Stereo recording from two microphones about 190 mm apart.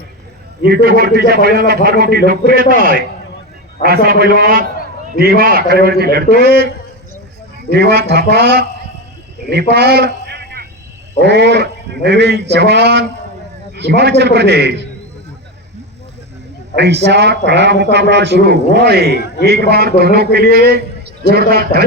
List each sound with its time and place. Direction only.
0.6 s a man's voice: 55° right (ahead or behind)
7.7 s a man's voice: 60° right (ahead or behind)
16.7 s a man's voice: 60° right (ahead or behind)